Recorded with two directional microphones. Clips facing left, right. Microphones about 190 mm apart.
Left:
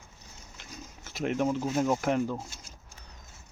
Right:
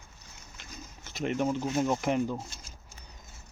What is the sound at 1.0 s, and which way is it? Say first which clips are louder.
Speech: left 1 dB; 5° left (ahead or behind).